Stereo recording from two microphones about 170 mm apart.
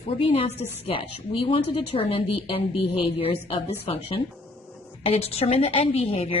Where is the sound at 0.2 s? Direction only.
35° left (ahead or behind).